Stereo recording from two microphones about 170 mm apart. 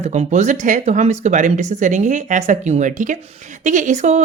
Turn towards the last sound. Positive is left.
turn(degrees=-45)  # may be behind; listen again after turning